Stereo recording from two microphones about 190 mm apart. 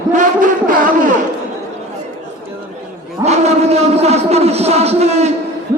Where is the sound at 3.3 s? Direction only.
35° right (ahead or behind).